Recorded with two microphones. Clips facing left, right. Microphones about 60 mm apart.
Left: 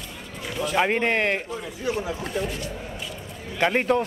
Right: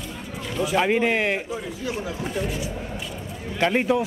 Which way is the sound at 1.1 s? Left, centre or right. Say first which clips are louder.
Even; centre.